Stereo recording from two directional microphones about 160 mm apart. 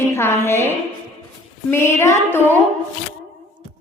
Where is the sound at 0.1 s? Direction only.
15° left (ahead or behind).